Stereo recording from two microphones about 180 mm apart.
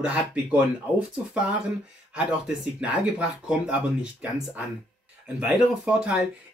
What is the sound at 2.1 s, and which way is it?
Speech, 5° right (ahead or behind).